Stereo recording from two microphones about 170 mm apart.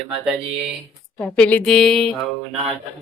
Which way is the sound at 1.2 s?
10° left (ahead or behind).